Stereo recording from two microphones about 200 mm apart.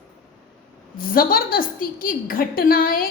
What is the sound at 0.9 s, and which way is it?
A woman's voice, 45° left (ahead or behind).